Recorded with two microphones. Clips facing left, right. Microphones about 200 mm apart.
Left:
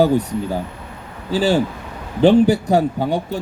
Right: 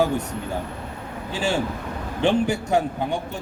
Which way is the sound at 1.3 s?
35° left (ahead or behind).